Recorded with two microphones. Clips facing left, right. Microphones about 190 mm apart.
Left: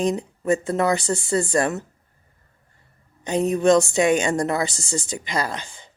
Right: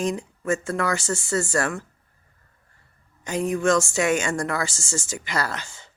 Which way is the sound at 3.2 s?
20° left (ahead or behind).